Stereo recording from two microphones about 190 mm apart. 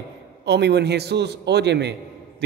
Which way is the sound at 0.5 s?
60° right (ahead or behind).